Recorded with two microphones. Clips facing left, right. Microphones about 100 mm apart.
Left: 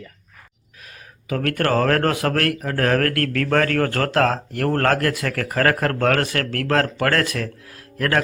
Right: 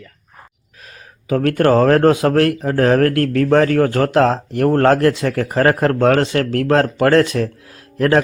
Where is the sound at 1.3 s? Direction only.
25° right (ahead or behind).